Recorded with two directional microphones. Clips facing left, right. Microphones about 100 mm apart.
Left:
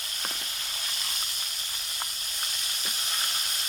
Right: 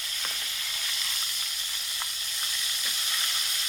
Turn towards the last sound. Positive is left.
turn(degrees=35)  # may be behind; listen again after turning